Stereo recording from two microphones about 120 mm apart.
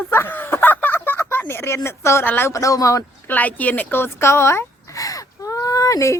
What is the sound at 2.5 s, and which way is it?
Speech, 30° left (ahead or behind).